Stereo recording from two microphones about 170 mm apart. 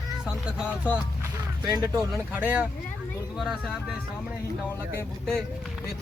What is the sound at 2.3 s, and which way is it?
Speech, 10° right (ahead or behind).